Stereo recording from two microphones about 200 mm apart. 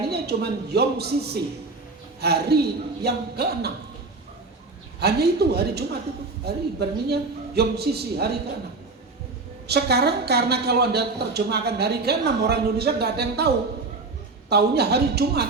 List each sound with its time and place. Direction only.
0.1 s a woman's voice: 55° right (ahead or behind)
4.9 s a woman's voice: 55° right (ahead or behind)
9.6 s a woman's voice: 55° right (ahead or behind)
14.5 s a woman's voice: 55° right (ahead or behind)